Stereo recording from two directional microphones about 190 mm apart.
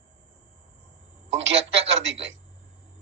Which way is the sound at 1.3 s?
70° right (ahead or behind).